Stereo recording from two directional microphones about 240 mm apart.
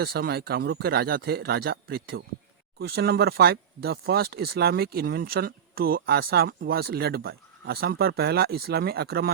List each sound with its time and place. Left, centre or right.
0.0 s speech: right